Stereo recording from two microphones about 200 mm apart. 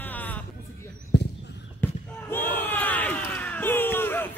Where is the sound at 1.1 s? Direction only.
55° left (ahead or behind).